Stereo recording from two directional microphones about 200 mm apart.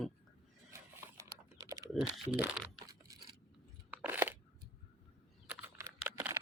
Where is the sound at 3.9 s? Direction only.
10° right (ahead or behind).